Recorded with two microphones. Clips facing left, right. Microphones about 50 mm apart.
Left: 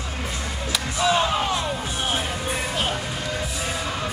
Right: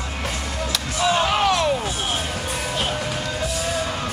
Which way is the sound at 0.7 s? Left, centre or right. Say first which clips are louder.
Even; centre.